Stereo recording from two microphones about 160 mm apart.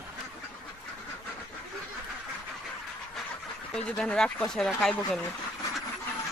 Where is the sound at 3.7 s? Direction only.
5° left (ahead or behind).